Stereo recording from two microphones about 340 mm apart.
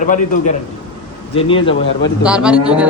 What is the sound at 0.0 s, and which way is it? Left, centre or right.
A man's voice, left.